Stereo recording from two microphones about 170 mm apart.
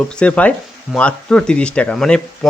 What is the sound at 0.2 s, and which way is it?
Speech, 5° left (ahead or behind).